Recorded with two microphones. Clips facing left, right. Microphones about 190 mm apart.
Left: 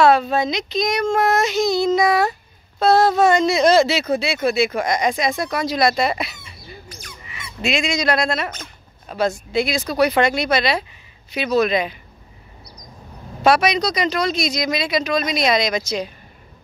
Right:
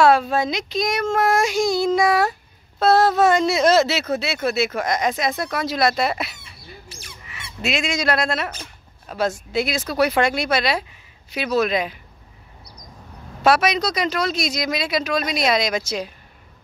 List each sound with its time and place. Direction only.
0.0 s speech: 5° right (ahead or behind)
7.2 s goose: 5° right (ahead or behind)
9.1 s speech: 5° right (ahead or behind)
13.4 s speech: 5° right (ahead or behind)